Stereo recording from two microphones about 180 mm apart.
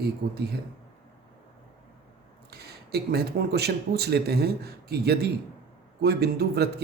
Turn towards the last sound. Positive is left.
turn(degrees=-65)  # may be behind; listen again after turning